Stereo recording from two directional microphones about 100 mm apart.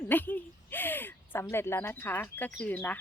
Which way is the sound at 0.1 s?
20° left (ahead or behind).